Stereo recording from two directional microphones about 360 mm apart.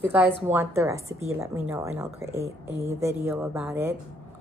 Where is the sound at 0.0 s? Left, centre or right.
Centre.